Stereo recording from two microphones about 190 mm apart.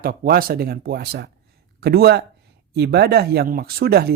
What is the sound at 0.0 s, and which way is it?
Speech, 50° right (ahead or behind).